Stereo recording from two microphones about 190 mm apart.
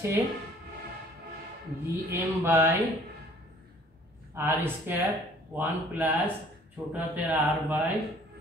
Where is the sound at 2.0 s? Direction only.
10° right (ahead or behind).